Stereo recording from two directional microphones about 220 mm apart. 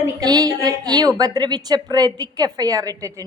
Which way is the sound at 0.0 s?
15° right (ahead or behind).